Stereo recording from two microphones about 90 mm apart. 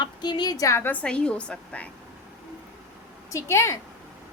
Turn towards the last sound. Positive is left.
turn(degrees=30)  # may be behind; listen again after turning